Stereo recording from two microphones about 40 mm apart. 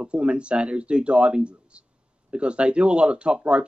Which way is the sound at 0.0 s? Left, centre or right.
Right.